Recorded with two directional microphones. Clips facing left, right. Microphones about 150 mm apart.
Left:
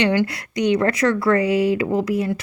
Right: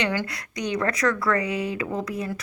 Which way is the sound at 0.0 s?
25° left (ahead or behind).